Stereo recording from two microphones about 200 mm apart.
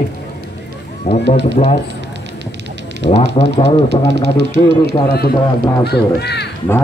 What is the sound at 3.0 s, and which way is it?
Speech, 30° left (ahead or behind).